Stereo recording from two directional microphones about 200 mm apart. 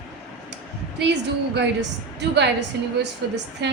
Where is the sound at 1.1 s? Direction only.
55° right (ahead or behind).